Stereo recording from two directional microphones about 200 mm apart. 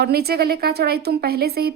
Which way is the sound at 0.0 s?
50° right (ahead or behind).